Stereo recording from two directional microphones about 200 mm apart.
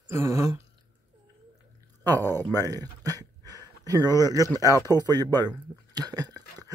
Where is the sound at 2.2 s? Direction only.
10° left (ahead or behind).